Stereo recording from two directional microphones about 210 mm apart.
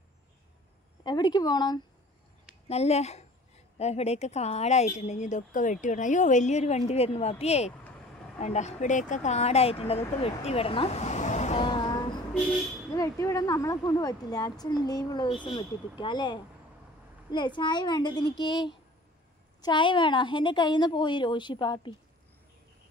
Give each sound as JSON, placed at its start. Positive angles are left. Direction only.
{"t": 1.0, "sound": "a woman's voice", "side_deg": 20}
{"t": 2.7, "sound": "a woman's voice", "side_deg": 30}